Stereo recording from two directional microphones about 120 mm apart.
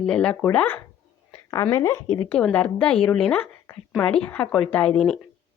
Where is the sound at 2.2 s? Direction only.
10° left (ahead or behind).